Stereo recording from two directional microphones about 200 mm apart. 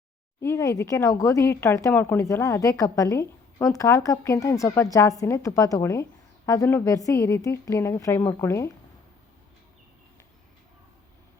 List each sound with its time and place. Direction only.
0.4 s speech: 15° left (ahead or behind)